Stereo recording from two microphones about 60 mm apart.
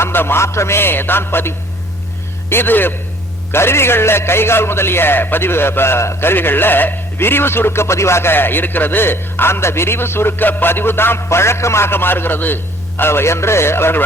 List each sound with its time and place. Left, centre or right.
0.0 s a man's voice: left